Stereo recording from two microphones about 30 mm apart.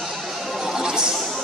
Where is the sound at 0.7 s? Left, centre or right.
Right.